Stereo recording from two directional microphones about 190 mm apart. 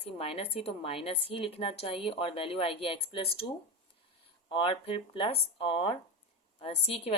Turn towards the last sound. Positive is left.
turn(degrees=30)  # may be behind; listen again after turning